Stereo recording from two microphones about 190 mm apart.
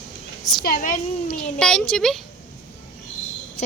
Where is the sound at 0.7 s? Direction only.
45° left (ahead or behind).